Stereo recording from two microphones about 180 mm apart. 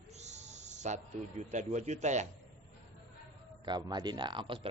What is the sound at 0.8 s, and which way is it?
A man's voice, 40° right (ahead or behind).